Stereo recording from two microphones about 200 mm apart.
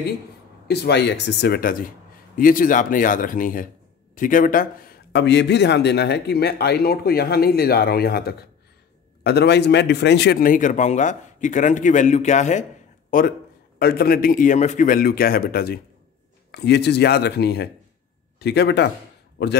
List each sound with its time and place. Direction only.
0.7 s a man's voice: 55° left (ahead or behind)